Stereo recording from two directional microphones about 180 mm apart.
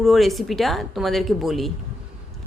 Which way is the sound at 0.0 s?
Centre (ahead or behind).